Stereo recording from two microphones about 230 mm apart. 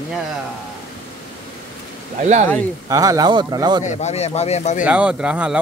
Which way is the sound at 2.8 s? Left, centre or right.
Centre.